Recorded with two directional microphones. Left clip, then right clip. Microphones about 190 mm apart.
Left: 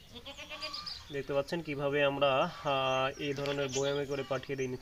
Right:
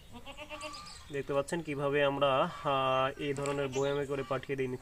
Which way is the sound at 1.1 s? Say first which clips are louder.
Right 1 dB; 5° right (ahead or behind).